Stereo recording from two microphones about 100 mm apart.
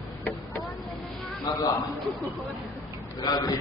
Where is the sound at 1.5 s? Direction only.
45° left (ahead or behind).